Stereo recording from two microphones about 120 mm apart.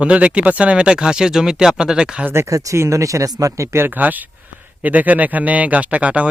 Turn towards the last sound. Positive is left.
turn(degrees=-10)  # may be behind; listen again after turning